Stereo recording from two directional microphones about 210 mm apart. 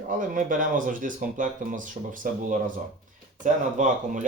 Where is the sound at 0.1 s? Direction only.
40° right (ahead or behind).